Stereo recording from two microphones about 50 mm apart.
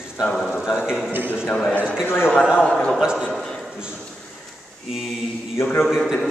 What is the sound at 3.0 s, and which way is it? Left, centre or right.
Speech, centre.